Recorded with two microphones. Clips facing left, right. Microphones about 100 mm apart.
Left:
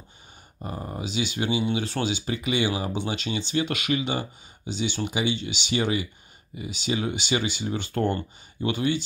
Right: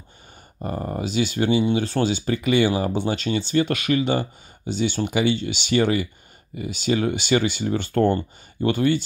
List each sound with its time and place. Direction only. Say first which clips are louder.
0.6 s speech: right 6 dB; 55° right (ahead or behind)